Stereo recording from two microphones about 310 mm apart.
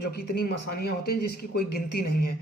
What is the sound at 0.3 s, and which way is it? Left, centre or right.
Speech, left.